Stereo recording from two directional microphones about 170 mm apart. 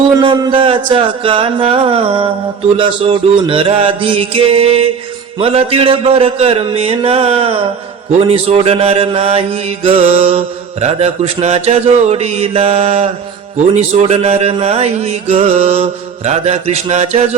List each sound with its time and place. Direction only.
0.2 s mantra: 30° right (ahead or behind)